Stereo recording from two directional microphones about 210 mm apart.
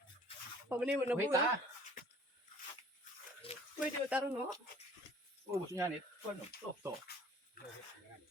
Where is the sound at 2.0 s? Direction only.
40° left (ahead or behind).